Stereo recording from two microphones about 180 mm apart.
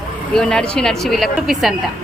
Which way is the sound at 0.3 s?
5° left (ahead or behind).